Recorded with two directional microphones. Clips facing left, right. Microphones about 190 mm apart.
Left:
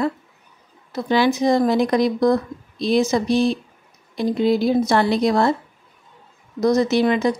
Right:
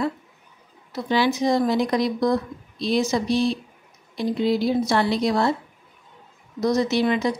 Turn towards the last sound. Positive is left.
turn(degrees=45)  # may be behind; listen again after turning